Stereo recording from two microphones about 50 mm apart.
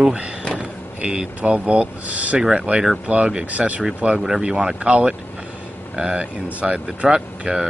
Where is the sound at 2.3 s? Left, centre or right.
Centre.